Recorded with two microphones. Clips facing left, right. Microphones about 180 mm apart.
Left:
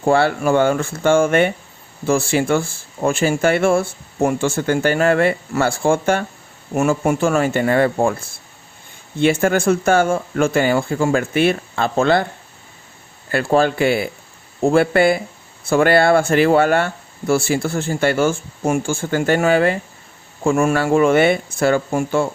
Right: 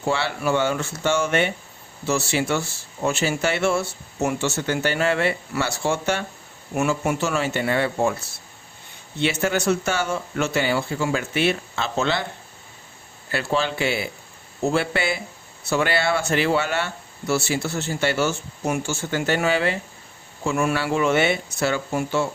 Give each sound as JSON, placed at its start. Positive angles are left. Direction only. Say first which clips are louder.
{"t": 0.0, "sound": "speech", "louder": "left 8 dB", "side_deg": 50}
{"t": 13.3, "sound": "speech", "louder": "left 8 dB", "side_deg": 50}